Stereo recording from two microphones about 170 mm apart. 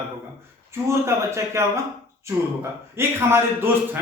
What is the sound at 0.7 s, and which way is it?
Speech, 15° right (ahead or behind).